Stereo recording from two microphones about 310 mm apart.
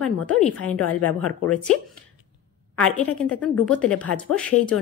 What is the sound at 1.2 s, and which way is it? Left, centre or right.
Speech, left.